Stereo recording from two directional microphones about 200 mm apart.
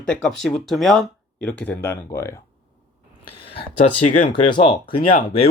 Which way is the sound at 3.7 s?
40° left (ahead or behind).